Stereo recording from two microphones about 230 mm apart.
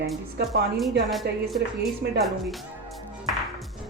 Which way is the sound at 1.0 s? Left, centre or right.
Centre.